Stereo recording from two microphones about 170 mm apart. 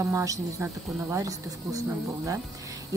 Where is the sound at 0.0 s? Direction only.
15° right (ahead or behind).